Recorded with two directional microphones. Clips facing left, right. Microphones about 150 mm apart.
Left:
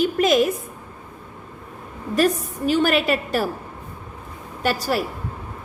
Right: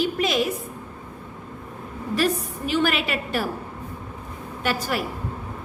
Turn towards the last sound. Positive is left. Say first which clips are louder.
# left 3 dB
turn(degrees=40)  # may be behind; listen again after turning